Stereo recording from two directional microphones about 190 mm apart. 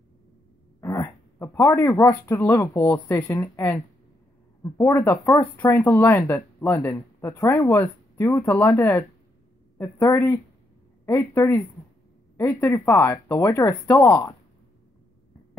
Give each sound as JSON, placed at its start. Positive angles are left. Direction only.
{"t": 0.7, "sound": "speech", "side_deg": 15}